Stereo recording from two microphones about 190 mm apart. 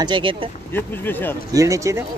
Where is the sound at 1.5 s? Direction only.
15° right (ahead or behind).